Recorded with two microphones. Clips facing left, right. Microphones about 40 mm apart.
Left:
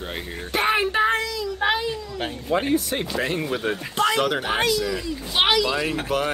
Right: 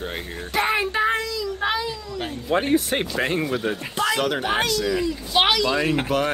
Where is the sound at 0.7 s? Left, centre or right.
Left.